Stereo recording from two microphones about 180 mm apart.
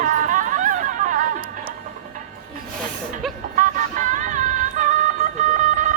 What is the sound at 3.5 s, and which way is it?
Music, 45° right (ahead or behind).